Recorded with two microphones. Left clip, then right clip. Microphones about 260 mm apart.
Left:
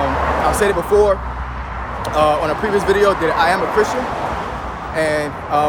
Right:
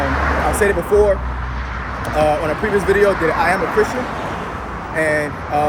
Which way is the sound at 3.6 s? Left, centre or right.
Left.